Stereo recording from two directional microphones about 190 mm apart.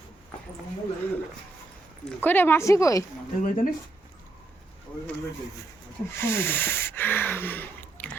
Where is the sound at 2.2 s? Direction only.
10° left (ahead or behind).